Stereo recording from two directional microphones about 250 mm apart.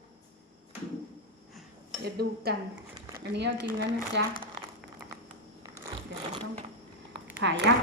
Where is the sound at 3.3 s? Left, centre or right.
Right.